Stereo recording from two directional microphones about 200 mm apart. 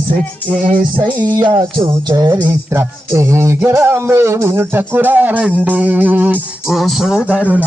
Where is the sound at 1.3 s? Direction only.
20° right (ahead or behind).